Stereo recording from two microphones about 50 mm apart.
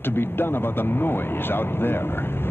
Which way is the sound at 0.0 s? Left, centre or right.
Left.